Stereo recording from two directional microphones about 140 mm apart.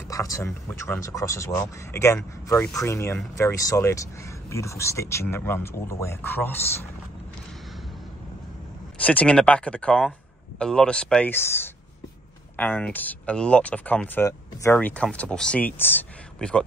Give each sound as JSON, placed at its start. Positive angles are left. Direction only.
{"t": 0.1, "sound": "speech", "side_deg": 25}
{"t": 9.0, "sound": "speech", "side_deg": 10}